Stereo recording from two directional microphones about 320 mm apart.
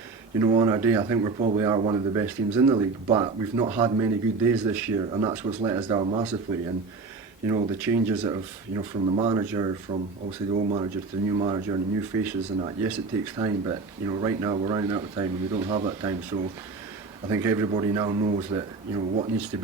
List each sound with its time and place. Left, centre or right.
0.3 s speech: centre
7.4 s speech: centre
17.2 s speech: centre